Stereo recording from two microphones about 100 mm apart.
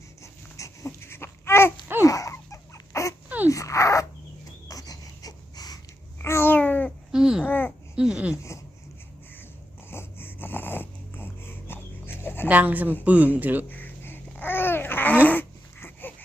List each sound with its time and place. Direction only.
0.2 s babbling: 30° left (ahead or behind)
2.0 s a sound: 35° left (ahead or behind)
3.2 s wheeze: 15° right (ahead or behind)
3.5 s dog: 30° left (ahead or behind)
6.1 s babbling: 25° left (ahead or behind)
7.1 s babbling: 5° right (ahead or behind)
7.4 s babbling: 20° left (ahead or behind)
7.9 s a sound: 10° right (ahead or behind)
8.4 s dog: 30° left (ahead or behind)
9.9 s dog: 25° left (ahead or behind)
12.5 s speech: 15° right (ahead or behind)
13.7 s babbling: 20° left (ahead or behind)
15.3 s dog: 20° left (ahead or behind)